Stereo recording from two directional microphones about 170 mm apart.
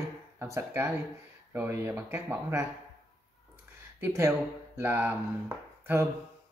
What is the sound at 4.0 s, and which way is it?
Speech, 15° right (ahead or behind).